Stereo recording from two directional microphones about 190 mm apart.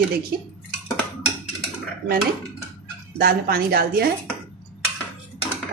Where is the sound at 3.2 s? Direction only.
50° right (ahead or behind).